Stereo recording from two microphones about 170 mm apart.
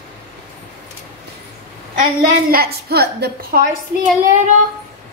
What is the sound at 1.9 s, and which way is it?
A woman's voice, 55° right (ahead or behind).